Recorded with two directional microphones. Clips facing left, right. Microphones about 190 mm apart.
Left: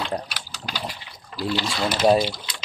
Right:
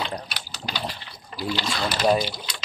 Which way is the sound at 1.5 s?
5° left (ahead or behind).